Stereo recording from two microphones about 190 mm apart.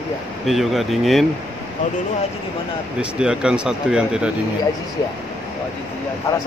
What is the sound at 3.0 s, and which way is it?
Speech, 5° right (ahead or behind).